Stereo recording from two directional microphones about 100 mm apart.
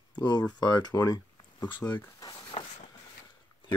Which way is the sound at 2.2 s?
45° left (ahead or behind).